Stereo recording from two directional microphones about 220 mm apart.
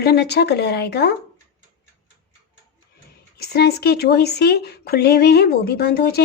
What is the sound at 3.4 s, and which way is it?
Speech, 45° left (ahead or behind).